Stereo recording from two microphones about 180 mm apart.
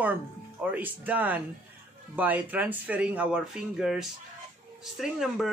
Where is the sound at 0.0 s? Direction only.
10° right (ahead or behind).